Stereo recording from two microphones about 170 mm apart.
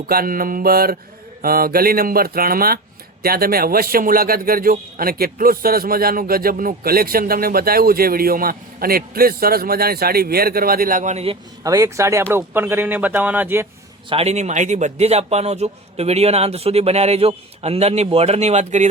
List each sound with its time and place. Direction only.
0.1 s a man's voice: 60° right (ahead or behind); by 11.3 s 40° right (ahead or behind)
11.6 s speech: 20° right (ahead or behind)
14.1 s a man's voice: 40° right (ahead or behind)